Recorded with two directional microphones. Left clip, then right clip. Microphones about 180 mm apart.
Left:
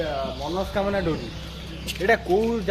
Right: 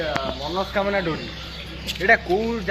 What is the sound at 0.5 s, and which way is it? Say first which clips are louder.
Speech: right 3 dB; 30° left (ahead or behind).